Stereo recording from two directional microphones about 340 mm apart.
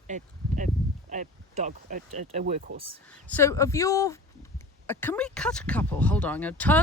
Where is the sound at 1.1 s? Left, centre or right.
Right.